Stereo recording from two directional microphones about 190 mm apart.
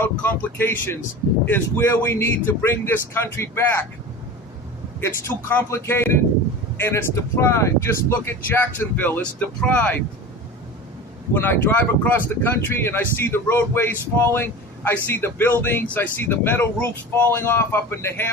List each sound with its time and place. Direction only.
0.0 s speech: 10° left (ahead or behind)
4.9 s speech: 15° left (ahead or behind)
11.3 s speech: 10° left (ahead or behind)